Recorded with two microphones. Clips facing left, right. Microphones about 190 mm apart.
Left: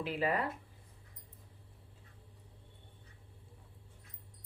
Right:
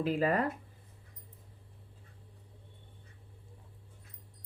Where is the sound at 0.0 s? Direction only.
45° right (ahead or behind).